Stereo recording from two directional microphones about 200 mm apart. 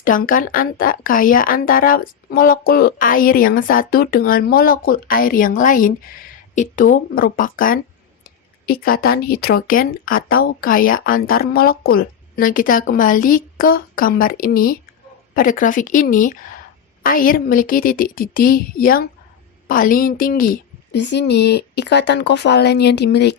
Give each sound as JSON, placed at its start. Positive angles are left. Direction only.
{"t": 0.0, "sound": "speech", "side_deg": 45}
{"t": 20.9, "sound": "speech", "side_deg": 60}